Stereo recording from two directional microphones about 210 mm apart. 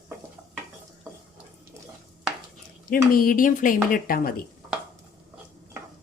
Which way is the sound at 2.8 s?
40° left (ahead or behind).